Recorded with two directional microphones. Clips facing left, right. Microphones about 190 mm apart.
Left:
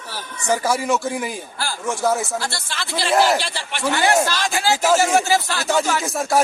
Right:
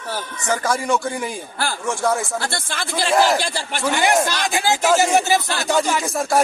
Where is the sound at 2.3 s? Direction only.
55° right (ahead or behind).